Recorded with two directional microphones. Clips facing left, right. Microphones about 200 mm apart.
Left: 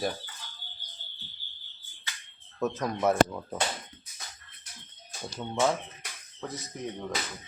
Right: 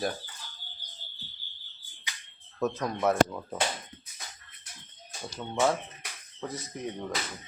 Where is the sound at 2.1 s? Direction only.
15° right (ahead or behind).